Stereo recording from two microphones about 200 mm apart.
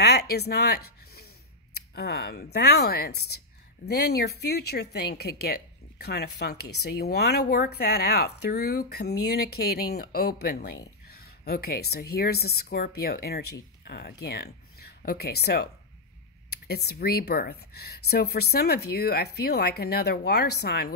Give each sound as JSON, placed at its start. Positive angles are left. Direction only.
{"t": 0.0, "sound": "a woman's voice", "side_deg": 55}